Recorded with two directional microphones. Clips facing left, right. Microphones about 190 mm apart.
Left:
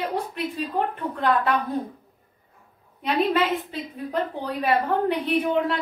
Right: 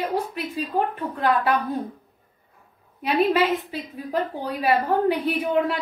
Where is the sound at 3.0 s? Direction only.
5° right (ahead or behind).